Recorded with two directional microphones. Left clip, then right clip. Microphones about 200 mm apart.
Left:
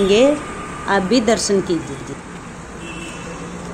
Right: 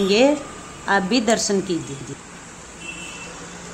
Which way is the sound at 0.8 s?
10° left (ahead or behind).